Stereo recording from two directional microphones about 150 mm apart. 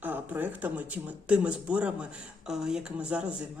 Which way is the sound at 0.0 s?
10° right (ahead or behind).